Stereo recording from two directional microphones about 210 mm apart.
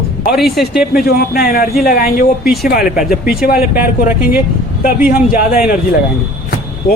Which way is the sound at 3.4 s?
45° left (ahead or behind).